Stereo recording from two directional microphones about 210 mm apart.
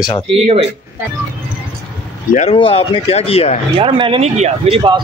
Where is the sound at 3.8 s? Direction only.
25° right (ahead or behind).